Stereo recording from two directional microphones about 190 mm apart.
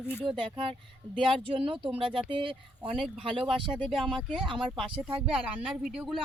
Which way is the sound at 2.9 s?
5° right (ahead or behind).